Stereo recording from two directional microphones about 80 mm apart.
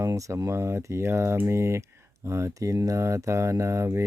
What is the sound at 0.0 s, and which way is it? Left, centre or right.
Speech, right.